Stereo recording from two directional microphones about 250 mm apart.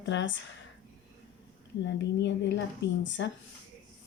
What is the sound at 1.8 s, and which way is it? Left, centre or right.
Speech, left.